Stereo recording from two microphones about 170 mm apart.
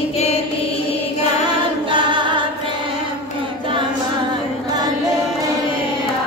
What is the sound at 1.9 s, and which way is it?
Choir, 25° right (ahead or behind).